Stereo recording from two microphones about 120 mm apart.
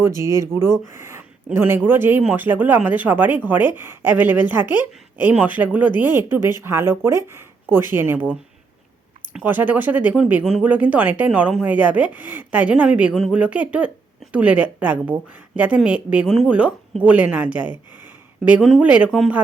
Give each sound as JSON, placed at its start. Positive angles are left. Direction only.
{"t": 0.0, "sound": "speech", "side_deg": -25}